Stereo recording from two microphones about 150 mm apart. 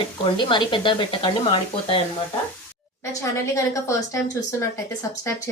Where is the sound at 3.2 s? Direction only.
20° left (ahead or behind).